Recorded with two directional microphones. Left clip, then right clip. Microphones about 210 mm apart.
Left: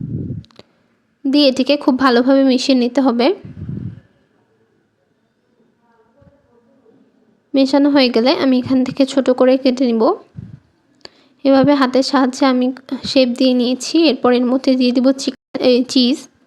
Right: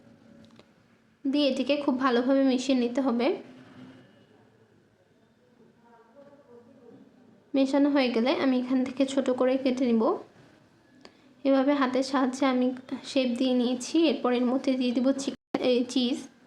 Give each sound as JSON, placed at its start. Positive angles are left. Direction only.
{"t": 0.4, "sound": "a sound", "side_deg": 40}
{"t": 1.2, "sound": "a woman's voice", "side_deg": 40}
{"t": 7.5, "sound": "a woman's voice", "side_deg": 40}